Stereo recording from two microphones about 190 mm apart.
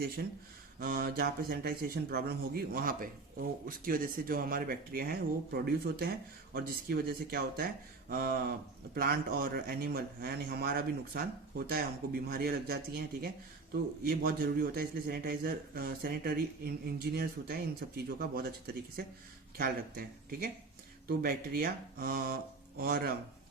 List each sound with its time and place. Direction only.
0.8 s speech: 50° right (ahead or behind)